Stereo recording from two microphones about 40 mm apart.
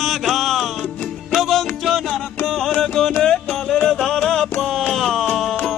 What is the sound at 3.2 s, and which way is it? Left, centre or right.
Music, centre.